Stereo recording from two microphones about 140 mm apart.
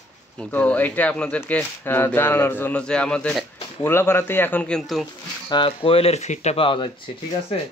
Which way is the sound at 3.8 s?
15° left (ahead or behind).